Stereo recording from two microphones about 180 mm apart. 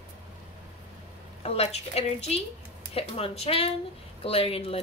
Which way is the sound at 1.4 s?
35° left (ahead or behind).